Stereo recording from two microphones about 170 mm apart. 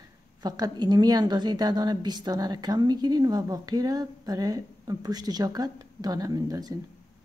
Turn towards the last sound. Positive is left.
turn(degrees=-20)  # may be behind; listen again after turning